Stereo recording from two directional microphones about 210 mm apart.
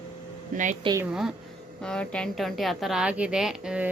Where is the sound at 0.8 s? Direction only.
15° right (ahead or behind).